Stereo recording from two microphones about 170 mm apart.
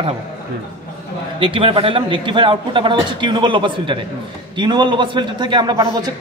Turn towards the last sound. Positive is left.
turn(degrees=-25)  # may be behind; listen again after turning